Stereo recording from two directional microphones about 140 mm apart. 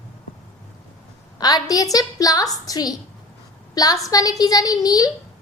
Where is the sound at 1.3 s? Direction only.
25° left (ahead or behind).